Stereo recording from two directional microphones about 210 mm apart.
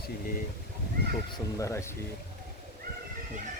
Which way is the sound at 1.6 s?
15° left (ahead or behind).